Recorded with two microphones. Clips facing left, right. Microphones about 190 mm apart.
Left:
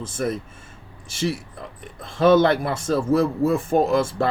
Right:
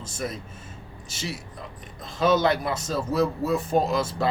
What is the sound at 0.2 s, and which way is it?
Speech, 50° left (ahead or behind).